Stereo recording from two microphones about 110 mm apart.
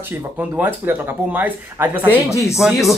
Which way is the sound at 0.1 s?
15° right (ahead or behind).